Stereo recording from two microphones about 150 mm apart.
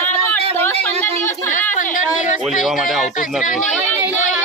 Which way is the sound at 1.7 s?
60° left (ahead or behind).